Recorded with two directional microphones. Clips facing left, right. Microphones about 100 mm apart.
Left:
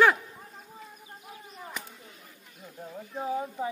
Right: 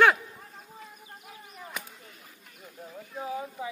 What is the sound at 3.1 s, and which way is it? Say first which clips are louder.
Speech: left 3 dB; 30° left (ahead or behind).